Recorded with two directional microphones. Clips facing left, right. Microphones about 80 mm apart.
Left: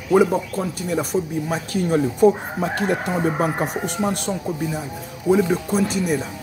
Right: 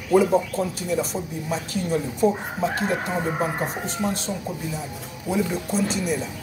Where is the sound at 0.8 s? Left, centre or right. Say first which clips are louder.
Left 3 dB; left.